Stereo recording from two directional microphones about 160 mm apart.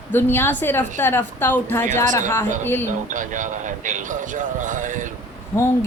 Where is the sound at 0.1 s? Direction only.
15° left (ahead or behind).